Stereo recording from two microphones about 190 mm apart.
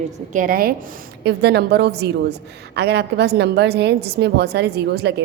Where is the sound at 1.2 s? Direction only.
60° right (ahead or behind).